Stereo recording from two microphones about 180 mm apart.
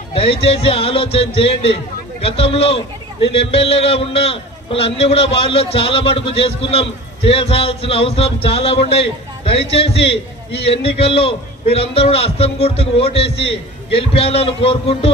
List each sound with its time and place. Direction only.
0.1 s a man's voice: 30° left (ahead or behind)